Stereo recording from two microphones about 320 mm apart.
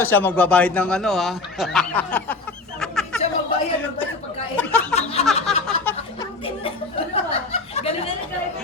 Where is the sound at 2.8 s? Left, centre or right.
Centre.